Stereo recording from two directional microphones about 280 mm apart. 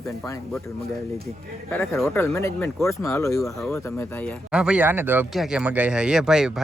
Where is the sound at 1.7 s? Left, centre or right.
Centre.